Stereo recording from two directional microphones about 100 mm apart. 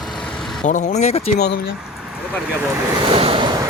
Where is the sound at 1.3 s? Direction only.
90° left.